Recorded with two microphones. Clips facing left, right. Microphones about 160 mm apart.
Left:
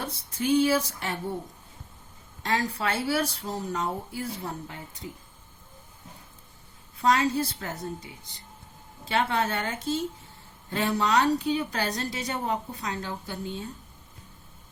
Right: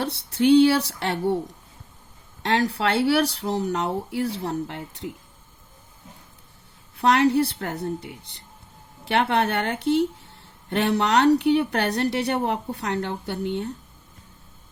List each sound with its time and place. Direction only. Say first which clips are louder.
0.0 s speech: right 9 dB; 70° right (ahead or behind)
2.4 s speech: right 5 dB; 70° right (ahead or behind)
6.9 s speech: right 5 dB; 65° right (ahead or behind)